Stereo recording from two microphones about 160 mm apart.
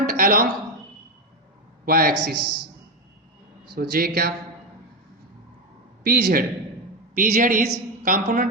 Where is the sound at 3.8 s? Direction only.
75° right (ahead or behind).